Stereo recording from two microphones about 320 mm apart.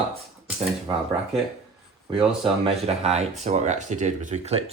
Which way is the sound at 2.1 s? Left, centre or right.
Centre.